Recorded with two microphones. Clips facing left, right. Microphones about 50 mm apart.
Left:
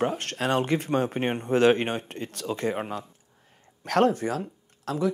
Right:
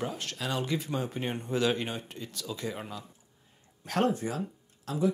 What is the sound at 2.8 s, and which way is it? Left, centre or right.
Speech, left.